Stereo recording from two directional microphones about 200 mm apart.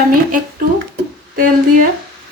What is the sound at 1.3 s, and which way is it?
Speech, 45° right (ahead or behind).